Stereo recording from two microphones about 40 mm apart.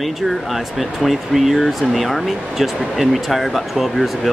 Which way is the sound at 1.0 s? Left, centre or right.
Centre.